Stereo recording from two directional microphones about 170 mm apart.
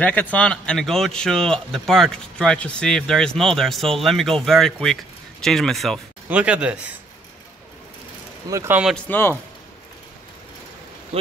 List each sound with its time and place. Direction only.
0.0 s speech: 10° left (ahead or behind)
6.2 s chopping: 10° right (ahead or behind)
8.5 s chopping: 15° right (ahead or behind)
9.1 s speech: 15° left (ahead or behind)